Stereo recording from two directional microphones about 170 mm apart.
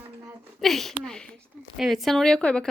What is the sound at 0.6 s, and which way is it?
Speech, centre (ahead or behind).